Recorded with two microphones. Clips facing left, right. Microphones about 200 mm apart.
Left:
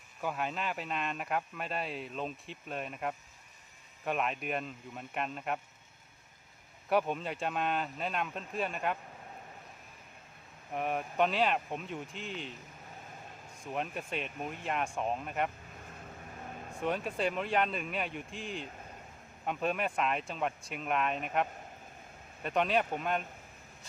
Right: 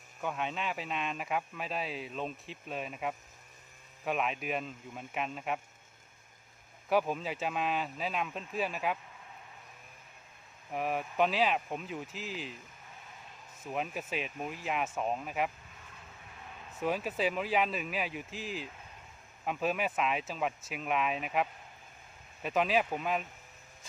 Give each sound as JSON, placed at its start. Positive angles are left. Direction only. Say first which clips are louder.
{"t": 0.2, "sound": "speech", "louder": "even", "side_deg": 5}
{"t": 6.9, "sound": "speech", "louder": "even", "side_deg": 0}
{"t": 10.7, "sound": "speech", "louder": "even", "side_deg": 0}
{"t": 13.7, "sound": "speech", "louder": "right 1 dB", "side_deg": -5}
{"t": 16.3, "sound": "vehicle", "louder": "left 5 dB", "side_deg": 45}
{"t": 16.8, "sound": "speech", "louder": "right 1 dB", "side_deg": -5}
{"t": 22.4, "sound": "speech", "louder": "right 1 dB", "side_deg": 0}